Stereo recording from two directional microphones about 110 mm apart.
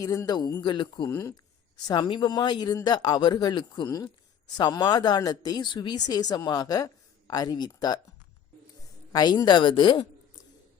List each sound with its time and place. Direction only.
0.0 s speech: 30° left (ahead or behind)
0.6 s a woman's voice: 45° left (ahead or behind)
1.1 s speech: 25° left (ahead or behind)
1.9 s speech: 45° left (ahead or behind)
9.1 s a woman's voice: 40° left (ahead or behind)